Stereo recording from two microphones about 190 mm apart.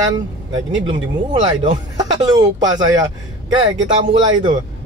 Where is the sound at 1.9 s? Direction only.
20° right (ahead or behind).